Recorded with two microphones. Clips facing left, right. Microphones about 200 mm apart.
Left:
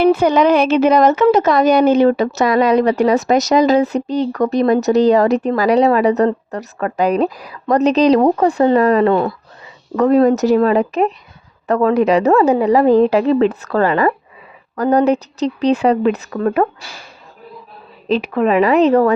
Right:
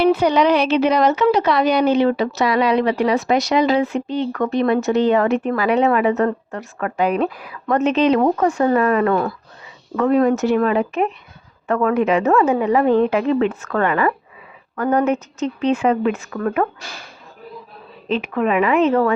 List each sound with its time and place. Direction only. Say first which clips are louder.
0.0 s speech: left 3 dB; 50° left (ahead or behind); by 9.3 s 25° left (ahead or behind)
9.9 s speech: left 4 dB; 40° left (ahead or behind)
18.1 s speech: left 4 dB; 35° left (ahead or behind)